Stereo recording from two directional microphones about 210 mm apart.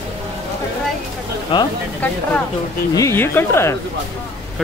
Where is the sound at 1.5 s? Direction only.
25° left (ahead or behind).